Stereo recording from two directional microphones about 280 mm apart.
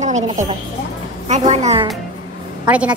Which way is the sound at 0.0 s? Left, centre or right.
Right.